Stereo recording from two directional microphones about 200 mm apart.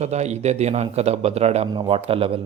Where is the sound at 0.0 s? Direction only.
35° right (ahead or behind).